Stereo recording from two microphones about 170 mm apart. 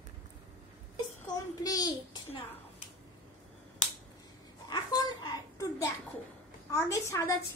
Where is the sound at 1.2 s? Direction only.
20° left (ahead or behind).